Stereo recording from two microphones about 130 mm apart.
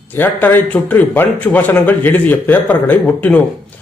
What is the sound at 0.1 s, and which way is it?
Speech, 15° left (ahead or behind).